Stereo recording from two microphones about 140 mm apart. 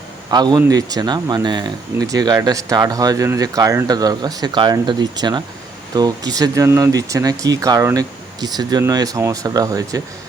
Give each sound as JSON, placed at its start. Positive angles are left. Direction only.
{"t": 0.3, "sound": "speech", "side_deg": -30}